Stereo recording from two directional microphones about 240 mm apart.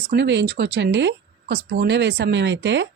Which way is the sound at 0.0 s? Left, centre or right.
Right.